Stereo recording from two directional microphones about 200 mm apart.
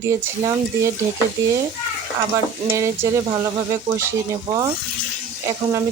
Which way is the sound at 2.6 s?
15° right (ahead or behind).